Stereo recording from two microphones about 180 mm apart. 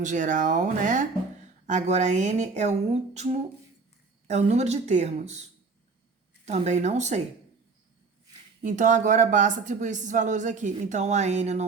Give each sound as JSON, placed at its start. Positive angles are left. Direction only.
{"t": 0.0, "sound": "speech", "side_deg": -45}
{"t": 4.3, "sound": "speech", "side_deg": -40}
{"t": 8.6, "sound": "speech", "side_deg": -45}